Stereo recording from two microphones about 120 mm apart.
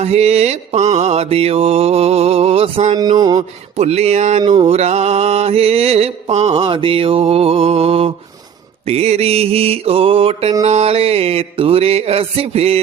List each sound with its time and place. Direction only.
0.0 s mantra: 60° right (ahead or behind)
3.0 s mantra: 35° right (ahead or behind)
3.8 s mantra: 60° right (ahead or behind)
10.6 s mantra: 65° right (ahead or behind)